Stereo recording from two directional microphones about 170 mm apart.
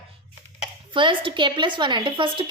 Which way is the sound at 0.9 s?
30° right (ahead or behind).